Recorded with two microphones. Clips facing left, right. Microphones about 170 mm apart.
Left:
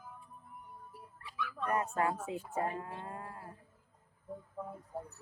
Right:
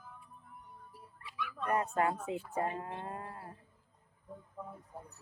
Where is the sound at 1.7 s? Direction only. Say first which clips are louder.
Right 1 dB; 25° right (ahead or behind).